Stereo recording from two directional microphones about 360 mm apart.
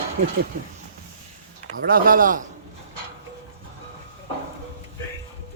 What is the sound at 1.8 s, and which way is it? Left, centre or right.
Speech, right.